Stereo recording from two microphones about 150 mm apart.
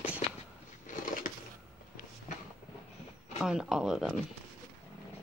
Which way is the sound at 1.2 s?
70° left (ahead or behind).